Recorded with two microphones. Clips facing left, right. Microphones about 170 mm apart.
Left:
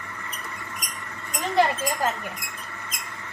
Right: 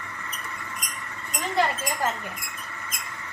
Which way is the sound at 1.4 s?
20° left (ahead or behind).